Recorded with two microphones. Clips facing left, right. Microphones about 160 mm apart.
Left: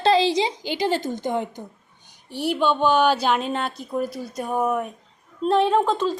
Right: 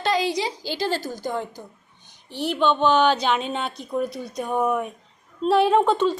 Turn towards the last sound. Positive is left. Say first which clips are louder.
# right 2 dB
turn(degrees=0)  # may be behind; listen again after turning